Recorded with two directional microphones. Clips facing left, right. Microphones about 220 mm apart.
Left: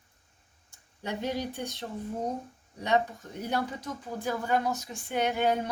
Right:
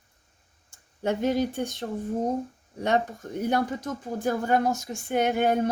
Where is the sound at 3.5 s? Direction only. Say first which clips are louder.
Right 4 dB; 45° right (ahead or behind).